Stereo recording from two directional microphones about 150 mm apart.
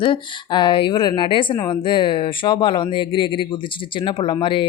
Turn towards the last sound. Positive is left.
turn(degrees=35)  # may be behind; listen again after turning